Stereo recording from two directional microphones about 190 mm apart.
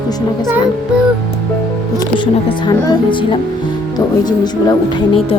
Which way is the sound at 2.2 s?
25° left (ahead or behind).